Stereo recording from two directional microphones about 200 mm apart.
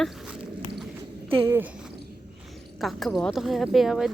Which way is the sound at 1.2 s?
15° right (ahead or behind).